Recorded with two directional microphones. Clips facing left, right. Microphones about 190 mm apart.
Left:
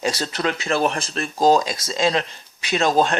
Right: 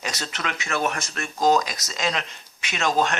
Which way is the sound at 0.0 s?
30° left (ahead or behind).